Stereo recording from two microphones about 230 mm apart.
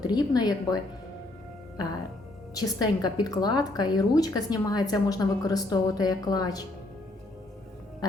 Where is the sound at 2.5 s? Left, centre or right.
Centre.